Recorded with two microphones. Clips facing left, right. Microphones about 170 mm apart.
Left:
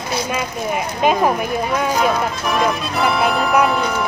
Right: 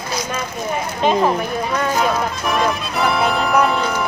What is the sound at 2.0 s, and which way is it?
Music, centre (ahead or behind).